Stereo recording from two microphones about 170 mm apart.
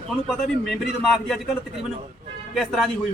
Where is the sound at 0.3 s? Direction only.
Centre (ahead or behind).